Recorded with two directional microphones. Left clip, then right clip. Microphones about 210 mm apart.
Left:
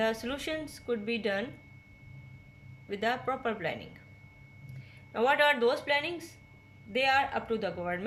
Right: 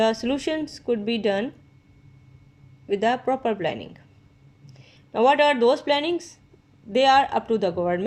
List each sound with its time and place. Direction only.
0.0 s a man's voice: 25° right (ahead or behind)
2.9 s a man's voice: 25° right (ahead or behind)
5.1 s a man's voice: 25° right (ahead or behind)